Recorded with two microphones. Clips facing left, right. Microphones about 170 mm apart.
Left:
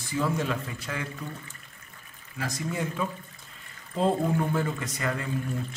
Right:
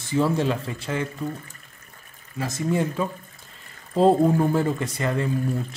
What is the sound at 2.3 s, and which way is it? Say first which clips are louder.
Speech: right 7 dB; 25° right (ahead or behind).